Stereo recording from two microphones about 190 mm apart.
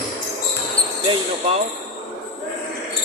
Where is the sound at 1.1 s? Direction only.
30° right (ahead or behind).